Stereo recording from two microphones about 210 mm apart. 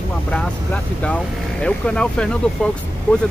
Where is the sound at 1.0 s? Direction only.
5° left (ahead or behind).